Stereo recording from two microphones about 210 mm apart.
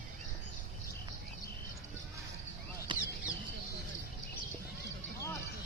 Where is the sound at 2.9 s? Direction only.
20° right (ahead or behind).